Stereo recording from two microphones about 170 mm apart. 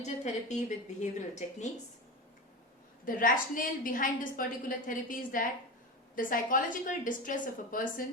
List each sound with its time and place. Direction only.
0.0 s a woman's voice: 45° left (ahead or behind)
3.1 s a woman's voice: 55° left (ahead or behind)